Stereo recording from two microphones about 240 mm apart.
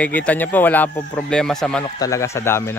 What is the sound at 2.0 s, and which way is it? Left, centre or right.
Speech, centre.